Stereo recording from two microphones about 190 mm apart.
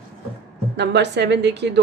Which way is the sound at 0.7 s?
65° right (ahead or behind).